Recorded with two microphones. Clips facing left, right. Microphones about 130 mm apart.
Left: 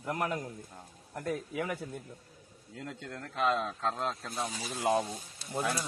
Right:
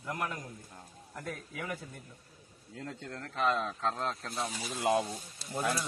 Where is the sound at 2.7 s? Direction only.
Centre (ahead or behind).